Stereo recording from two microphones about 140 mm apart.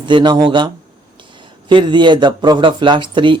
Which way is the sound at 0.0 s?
35° right (ahead or behind).